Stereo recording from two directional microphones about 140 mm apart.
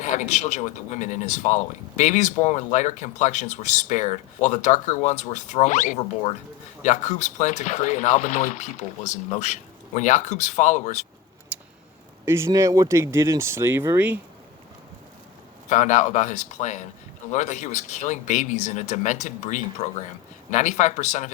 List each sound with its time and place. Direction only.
0.0 s speech: 60° left (ahead or behind)
11.5 s a sound: 10° right (ahead or behind)
12.2 s speech: 20° right (ahead or behind)
15.7 s speech: 60° left (ahead or behind)